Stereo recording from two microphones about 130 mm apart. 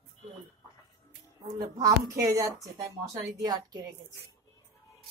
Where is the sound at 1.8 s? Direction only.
30° right (ahead or behind).